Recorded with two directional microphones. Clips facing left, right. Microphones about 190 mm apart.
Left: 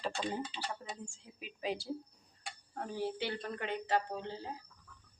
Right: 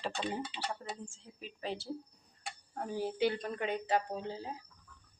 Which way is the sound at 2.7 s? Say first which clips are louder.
Right 2 dB; 10° right (ahead or behind).